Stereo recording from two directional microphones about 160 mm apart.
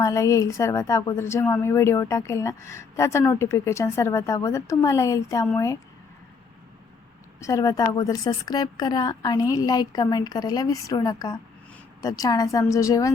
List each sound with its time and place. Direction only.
0.0 s a woman's voice: 20° left (ahead or behind)
7.3 s a woman's voice: 20° left (ahead or behind)